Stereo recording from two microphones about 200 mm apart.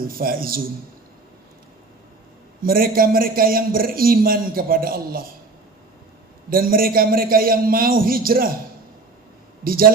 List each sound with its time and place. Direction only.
0.1 s a man's voice: 45° right (ahead or behind)
2.6 s a man's voice: 45° right (ahead or behind)
6.5 s a man's voice: 45° right (ahead or behind)
9.6 s a man's voice: 45° right (ahead or behind)